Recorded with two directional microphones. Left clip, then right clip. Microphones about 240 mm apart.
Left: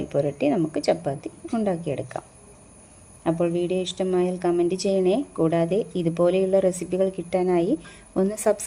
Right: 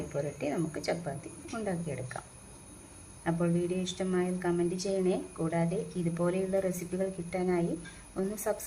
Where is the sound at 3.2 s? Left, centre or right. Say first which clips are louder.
Left 8 dB; left.